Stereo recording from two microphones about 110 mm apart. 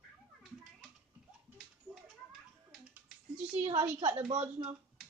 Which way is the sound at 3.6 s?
50° right (ahead or behind).